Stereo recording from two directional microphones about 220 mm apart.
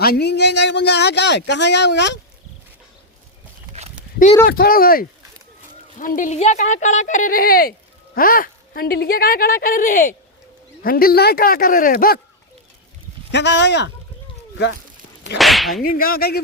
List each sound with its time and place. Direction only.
0.0 s speech: 45° left (ahead or behind)
4.4 s a woman's voice: 45° left (ahead or behind)
13.3 s speech: 50° left (ahead or behind)
15.4 s whip: centre (ahead or behind)
15.8 s a woman's voice: 40° left (ahead or behind)